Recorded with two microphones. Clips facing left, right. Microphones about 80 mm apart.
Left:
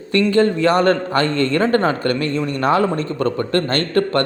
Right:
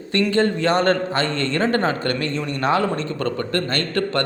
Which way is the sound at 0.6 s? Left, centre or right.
Left.